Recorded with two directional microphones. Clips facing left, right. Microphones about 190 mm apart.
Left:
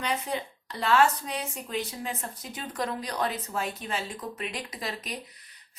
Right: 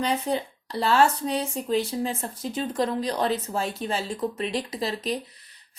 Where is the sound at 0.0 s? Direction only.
35° right (ahead or behind).